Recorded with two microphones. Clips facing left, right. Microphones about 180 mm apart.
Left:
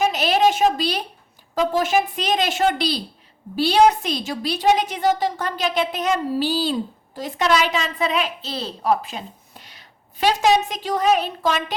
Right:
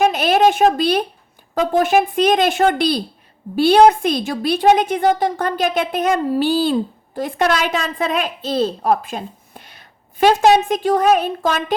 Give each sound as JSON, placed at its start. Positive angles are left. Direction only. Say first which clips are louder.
{"t": 0.0, "sound": "a woman's voice", "louder": "right 4 dB", "side_deg": -50}